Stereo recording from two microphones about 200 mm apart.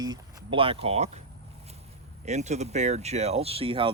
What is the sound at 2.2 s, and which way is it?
Speech, 35° right (ahead or behind).